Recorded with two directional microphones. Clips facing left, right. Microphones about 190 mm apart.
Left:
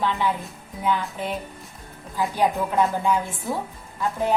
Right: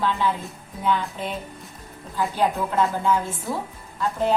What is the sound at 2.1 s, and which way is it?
A woman's voice, 15° left (ahead or behind).